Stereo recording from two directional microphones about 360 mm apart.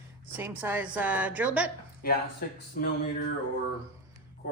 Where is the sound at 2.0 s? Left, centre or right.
Left.